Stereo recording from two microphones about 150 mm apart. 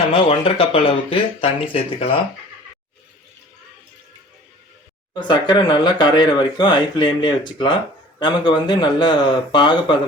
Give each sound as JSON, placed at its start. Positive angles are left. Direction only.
{"t": 0.1, "sound": "speech", "side_deg": 35}
{"t": 5.1, "sound": "speech", "side_deg": 30}